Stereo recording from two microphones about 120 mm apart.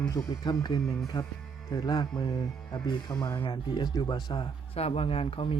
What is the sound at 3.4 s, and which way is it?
Speech, 40° left (ahead or behind).